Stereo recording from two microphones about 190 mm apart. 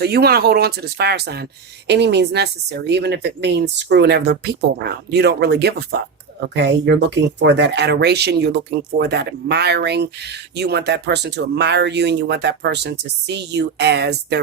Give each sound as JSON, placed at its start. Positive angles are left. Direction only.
{"t": 0.0, "sound": "speech", "side_deg": -55}